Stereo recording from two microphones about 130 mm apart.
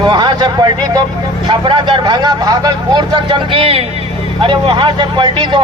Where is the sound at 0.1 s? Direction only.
35° right (ahead or behind).